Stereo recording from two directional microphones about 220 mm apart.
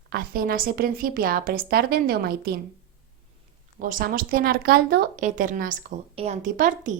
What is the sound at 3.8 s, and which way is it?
Speech, 40° right (ahead or behind).